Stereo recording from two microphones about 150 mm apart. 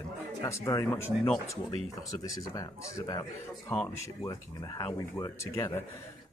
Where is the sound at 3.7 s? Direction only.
15° left (ahead or behind).